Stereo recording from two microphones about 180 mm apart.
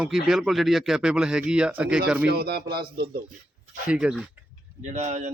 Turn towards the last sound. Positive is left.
turn(degrees=-40)  # may be behind; listen again after turning